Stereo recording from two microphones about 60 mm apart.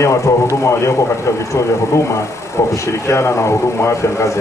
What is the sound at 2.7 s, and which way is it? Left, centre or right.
A man's voice, left.